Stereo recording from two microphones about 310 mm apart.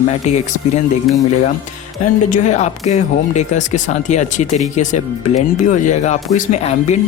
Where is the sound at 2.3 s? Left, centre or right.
Left.